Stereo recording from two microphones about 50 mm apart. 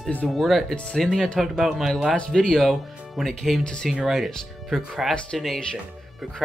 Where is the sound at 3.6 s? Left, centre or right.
Centre.